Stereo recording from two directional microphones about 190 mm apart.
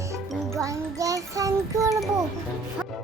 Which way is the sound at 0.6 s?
15° right (ahead or behind).